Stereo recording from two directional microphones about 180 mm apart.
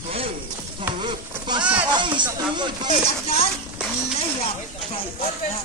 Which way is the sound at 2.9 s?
35° left (ahead or behind).